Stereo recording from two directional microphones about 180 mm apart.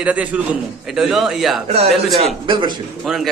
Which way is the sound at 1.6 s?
35° right (ahead or behind).